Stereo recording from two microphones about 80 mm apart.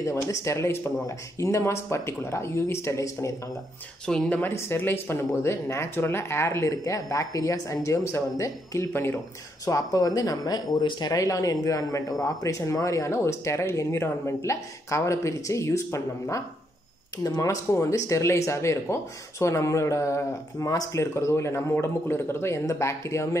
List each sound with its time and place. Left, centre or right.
0.0 s speech: left
4.0 s speech: centre
4.3 s speech: left